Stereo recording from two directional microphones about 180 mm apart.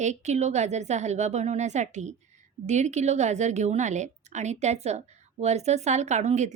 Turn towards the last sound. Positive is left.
turn(degrees=-40)  # may be behind; listen again after turning